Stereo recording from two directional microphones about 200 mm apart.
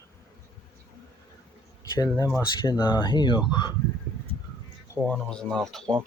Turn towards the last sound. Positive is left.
turn(degrees=0)  # may be behind; listen again after turning